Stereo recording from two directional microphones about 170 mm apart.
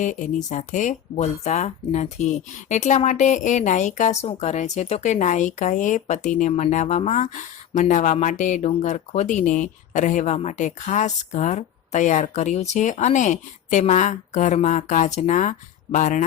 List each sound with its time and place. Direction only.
0.0 s speech: 45° left (ahead or behind)